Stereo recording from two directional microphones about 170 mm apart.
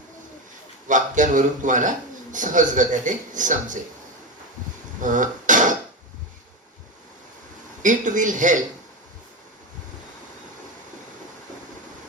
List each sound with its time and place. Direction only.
0.9 s speech: 50° right (ahead or behind)
4.9 s a sound: 50° right (ahead or behind)
7.8 s speech: 50° right (ahead or behind)